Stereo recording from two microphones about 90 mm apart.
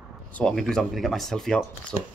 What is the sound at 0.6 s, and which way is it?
Speech, 5° left (ahead or behind).